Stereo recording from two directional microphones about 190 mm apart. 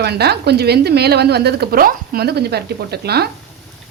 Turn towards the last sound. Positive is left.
turn(degrees=-55)  # may be behind; listen again after turning